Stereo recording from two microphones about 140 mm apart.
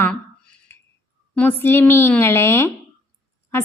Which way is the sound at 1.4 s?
15° left (ahead or behind).